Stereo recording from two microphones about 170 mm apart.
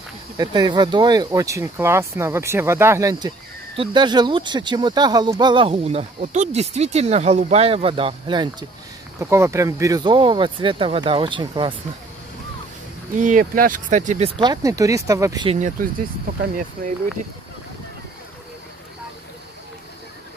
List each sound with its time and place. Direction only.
0.4 s speech: 25° right (ahead or behind)
9.2 s speech: 15° right (ahead or behind)
13.1 s speech: 50° right (ahead or behind)
14.4 s speech: 20° right (ahead or behind)
15.4 s speech: 45° right (ahead or behind)
16.8 s speech: 60° right (ahead or behind)